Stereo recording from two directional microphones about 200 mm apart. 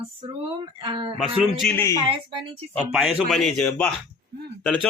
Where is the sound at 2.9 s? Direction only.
5° right (ahead or behind).